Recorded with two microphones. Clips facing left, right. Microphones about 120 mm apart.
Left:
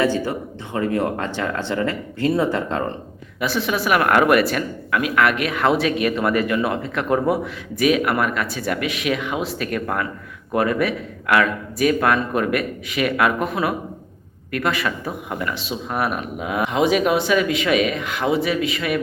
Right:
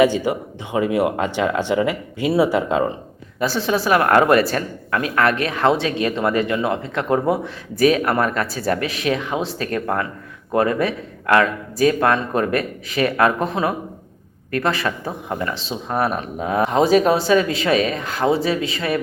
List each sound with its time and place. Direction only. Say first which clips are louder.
0.0 s speech: right 4 dB; 15° right (ahead or behind)
3.4 s speech: right 2 dB; 30° right (ahead or behind)